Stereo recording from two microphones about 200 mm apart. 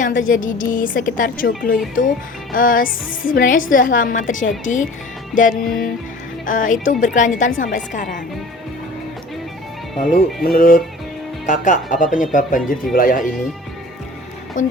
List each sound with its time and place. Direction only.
0.2 s speech: 40° left (ahead or behind)
10.0 s speech: 45° left (ahead or behind)
14.6 s speech: 40° left (ahead or behind)